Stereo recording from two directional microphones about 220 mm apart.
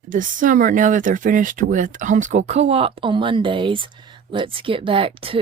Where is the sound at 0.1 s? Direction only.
35° right (ahead or behind).